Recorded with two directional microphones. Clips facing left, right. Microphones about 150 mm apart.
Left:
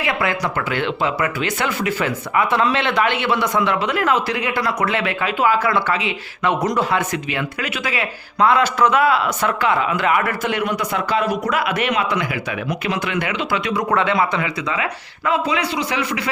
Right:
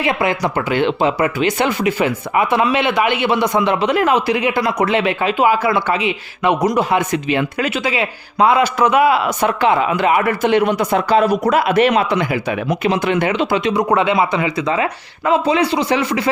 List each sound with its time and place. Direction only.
0.0 s speech: 20° right (ahead or behind)